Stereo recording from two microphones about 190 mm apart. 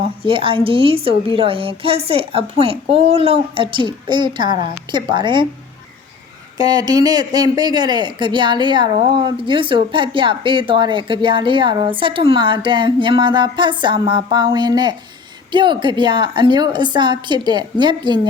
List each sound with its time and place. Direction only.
0.3 s speech: 25° right (ahead or behind)
6.6 s speech: 20° right (ahead or behind)